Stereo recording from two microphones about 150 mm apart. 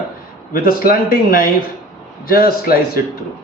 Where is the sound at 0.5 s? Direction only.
75° left (ahead or behind).